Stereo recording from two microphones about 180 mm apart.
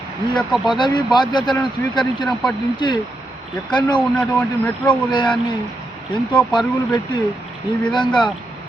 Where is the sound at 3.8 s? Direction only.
25° left (ahead or behind).